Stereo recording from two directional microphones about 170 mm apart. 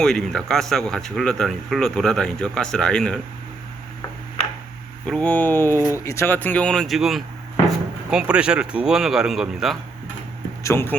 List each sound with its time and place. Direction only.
0.0 s speech: 5° left (ahead or behind)
5.0 s speech: 5° left (ahead or behind)
10.6 s speech: 15° left (ahead or behind)